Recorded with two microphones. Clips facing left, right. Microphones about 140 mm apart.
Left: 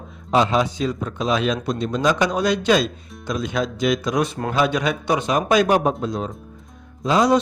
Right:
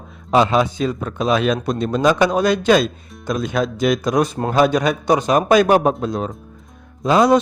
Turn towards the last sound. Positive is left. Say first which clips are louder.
# right 3 dB
turn(degrees=-55)  # may be behind; listen again after turning